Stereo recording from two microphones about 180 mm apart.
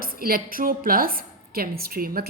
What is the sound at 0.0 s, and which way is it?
A woman's voice, 55° right (ahead or behind).